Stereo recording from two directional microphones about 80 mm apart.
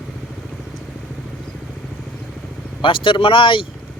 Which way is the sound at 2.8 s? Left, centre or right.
Left.